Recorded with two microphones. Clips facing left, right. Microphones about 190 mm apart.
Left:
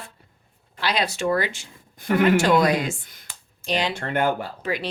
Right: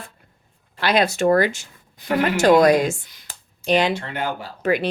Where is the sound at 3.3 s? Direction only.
55° right (ahead or behind).